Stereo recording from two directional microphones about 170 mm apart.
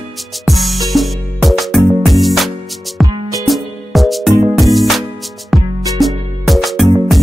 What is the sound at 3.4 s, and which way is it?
Music, centre (ahead or behind).